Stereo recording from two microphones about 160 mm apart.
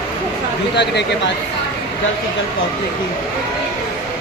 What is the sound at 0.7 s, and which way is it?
Speech, 90° left.